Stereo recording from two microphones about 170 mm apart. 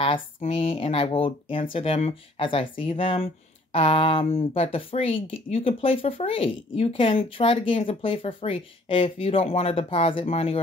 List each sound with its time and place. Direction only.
0.0 s speech: 35° left (ahead or behind)